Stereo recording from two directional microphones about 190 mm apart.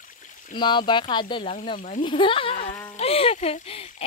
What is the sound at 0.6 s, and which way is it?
Speech, 25° left (ahead or behind).